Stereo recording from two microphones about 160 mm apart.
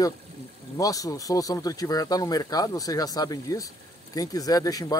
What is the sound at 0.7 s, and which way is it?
Speech, 20° left (ahead or behind).